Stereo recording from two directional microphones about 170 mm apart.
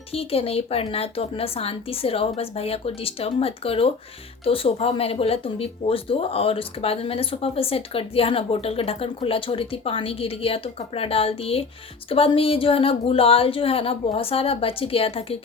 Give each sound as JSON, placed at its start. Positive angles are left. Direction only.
{"t": 0.1, "sound": "speech", "side_deg": 35}